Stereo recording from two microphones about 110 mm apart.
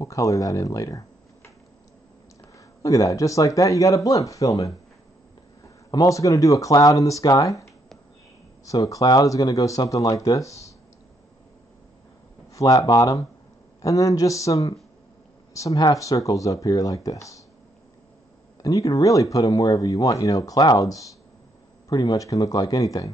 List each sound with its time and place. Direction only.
0.0 s speech: 30° left (ahead or behind)
2.8 s speech: 30° left (ahead or behind)
5.9 s speech: 30° left (ahead or behind)
8.6 s speech: 30° left (ahead or behind)
12.5 s speech: 35° left (ahead or behind)
18.6 s speech: 30° left (ahead or behind)